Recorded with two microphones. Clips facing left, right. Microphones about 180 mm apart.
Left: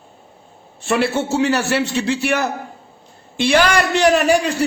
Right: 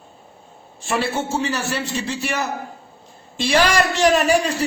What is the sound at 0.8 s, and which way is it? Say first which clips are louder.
A man's voice: left 4 dB; 65° left (ahead or behind).